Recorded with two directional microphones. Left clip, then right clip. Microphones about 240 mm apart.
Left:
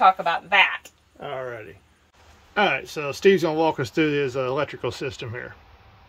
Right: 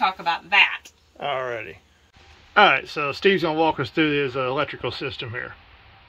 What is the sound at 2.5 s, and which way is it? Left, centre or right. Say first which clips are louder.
Speech: right 6 dB; centre.